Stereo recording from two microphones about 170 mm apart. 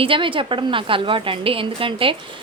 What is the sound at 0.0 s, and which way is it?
A woman's voice, 30° right (ahead or behind).